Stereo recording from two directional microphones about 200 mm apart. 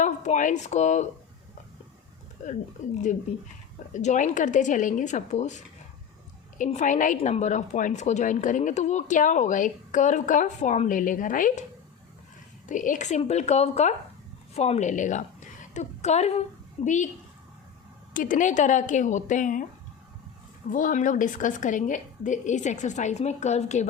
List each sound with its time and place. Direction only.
0.0 s a woman's voice: 35° left (ahead or behind)
2.4 s a woman's voice: 40° left (ahead or behind)
6.6 s a woman's voice: 40° left (ahead or behind)
12.6 s a woman's voice: 40° left (ahead or behind)
18.1 s a woman's voice: 40° left (ahead or behind)
20.7 s a woman's voice: 40° left (ahead or behind)